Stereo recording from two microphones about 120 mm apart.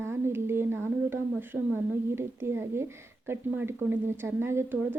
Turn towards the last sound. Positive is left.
turn(degrees=-20)  # may be behind; listen again after turning